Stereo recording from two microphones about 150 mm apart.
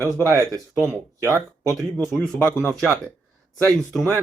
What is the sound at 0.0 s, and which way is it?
Speech, 20° right (ahead or behind).